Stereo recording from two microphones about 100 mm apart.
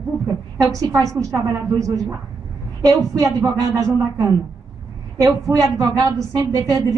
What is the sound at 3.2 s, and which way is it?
A woman's voice, 35° right (ahead or behind).